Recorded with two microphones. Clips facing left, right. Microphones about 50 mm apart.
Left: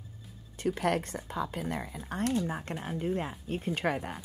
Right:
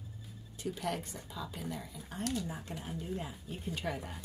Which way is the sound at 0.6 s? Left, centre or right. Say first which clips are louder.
Left 8 dB; left.